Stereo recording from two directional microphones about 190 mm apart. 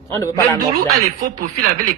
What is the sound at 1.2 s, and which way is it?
Speech, 45° right (ahead or behind).